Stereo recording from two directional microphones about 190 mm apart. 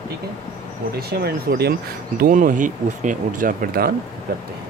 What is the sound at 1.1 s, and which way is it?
Speech, 55° right (ahead or behind).